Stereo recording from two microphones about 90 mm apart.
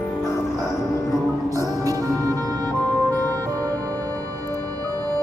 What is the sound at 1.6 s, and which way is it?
Music, 40° right (ahead or behind).